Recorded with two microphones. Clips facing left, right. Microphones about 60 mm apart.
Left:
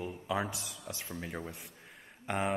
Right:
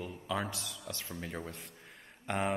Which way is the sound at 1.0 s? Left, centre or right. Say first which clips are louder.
Left 1 dB; centre.